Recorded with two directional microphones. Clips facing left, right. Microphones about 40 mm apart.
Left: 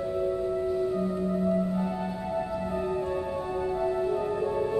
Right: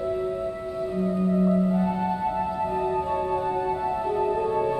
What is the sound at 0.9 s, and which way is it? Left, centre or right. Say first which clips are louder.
Music: right 4 dB; right.